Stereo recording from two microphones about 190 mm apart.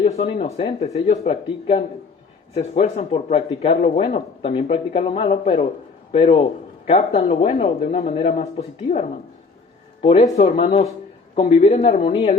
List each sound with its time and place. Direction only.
0.2 s speech: 30° left (ahead or behind)